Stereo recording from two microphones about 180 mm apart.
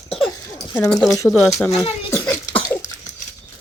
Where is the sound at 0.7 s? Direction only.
5° left (ahead or behind).